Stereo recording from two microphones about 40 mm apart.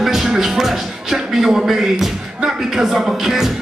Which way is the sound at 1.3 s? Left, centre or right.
Centre.